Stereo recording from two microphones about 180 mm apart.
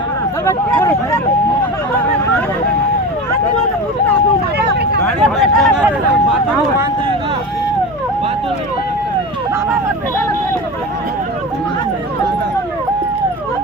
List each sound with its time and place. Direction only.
0.4 s speech: 15° left (ahead or behind)
4.5 s vehicle: 65° right (ahead or behind)
5.0 s speech: centre (ahead or behind)